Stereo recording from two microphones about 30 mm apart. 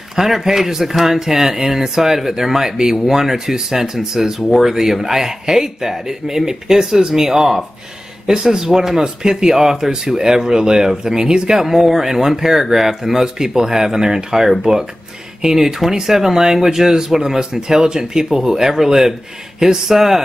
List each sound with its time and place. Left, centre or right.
0.1 s speech: centre
11.6 s speech: centre